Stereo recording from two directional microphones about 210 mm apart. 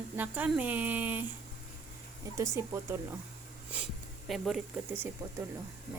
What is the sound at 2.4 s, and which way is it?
Speech, 15° right (ahead or behind).